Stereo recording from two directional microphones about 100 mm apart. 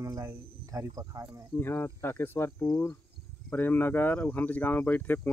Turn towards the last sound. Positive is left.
turn(degrees=20)  # may be behind; listen again after turning